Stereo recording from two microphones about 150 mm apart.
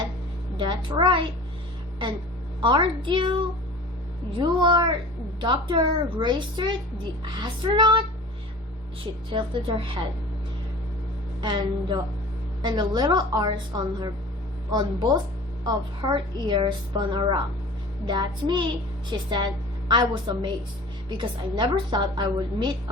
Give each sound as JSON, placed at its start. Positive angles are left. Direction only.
{"t": 0.5, "sound": "a child's voice", "side_deg": -30}
{"t": 2.6, "sound": "a woman's voice", "side_deg": -30}
{"t": 4.4, "sound": "a woman's voice", "side_deg": -30}
{"t": 9.3, "sound": "a woman's voice", "side_deg": -35}
{"t": 11.4, "sound": "a woman's voice", "side_deg": -30}